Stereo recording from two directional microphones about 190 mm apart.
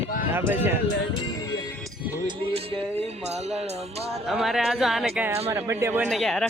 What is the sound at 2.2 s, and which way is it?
Music, 30° right (ahead or behind).